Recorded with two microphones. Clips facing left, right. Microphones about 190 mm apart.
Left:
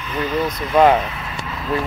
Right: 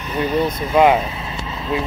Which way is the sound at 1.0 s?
25° right (ahead or behind).